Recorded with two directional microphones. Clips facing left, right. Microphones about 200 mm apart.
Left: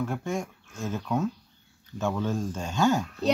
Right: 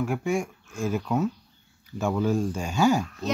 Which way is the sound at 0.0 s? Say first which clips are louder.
Right 4 dB; 10° right (ahead or behind).